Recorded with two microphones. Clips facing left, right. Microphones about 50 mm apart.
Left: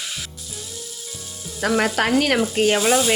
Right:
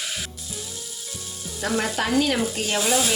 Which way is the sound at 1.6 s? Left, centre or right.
Left.